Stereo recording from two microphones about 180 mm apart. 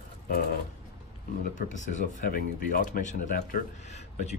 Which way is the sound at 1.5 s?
40° left (ahead or behind).